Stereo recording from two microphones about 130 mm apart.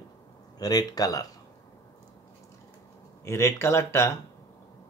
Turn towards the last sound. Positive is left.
turn(degrees=20)  # may be behind; listen again after turning